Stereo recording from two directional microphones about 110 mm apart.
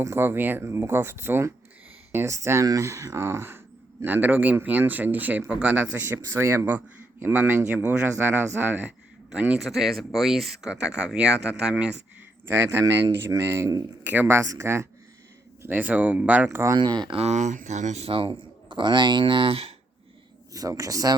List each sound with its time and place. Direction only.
0.0 s speech: 20° right (ahead or behind)
6.0 s speech: 25° right (ahead or behind); by 11.9 s 10° right (ahead or behind)
13.2 s speech: 25° right (ahead or behind)
14.0 s speech: 15° right (ahead or behind)
15.6 s speech: 15° right (ahead or behind)
16.7 s speech: 40° right (ahead or behind)
17.2 s a man's voice: 85° right; by 19.7 s 60° right (ahead or behind)
20.5 s speech: 30° right (ahead or behind)